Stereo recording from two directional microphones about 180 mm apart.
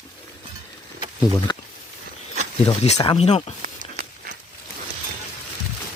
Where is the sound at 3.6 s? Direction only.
50° right (ahead or behind).